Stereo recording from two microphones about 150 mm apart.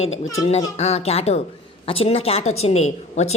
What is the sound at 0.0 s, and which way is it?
A woman's voice, 45° left (ahead or behind).